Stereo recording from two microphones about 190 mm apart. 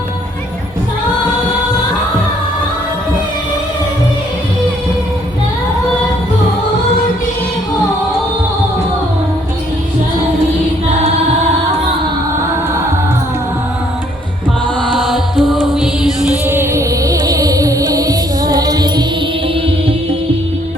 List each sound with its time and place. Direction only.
14.9 s music: centre (ahead or behind); by 19.0 s 20° right (ahead or behind)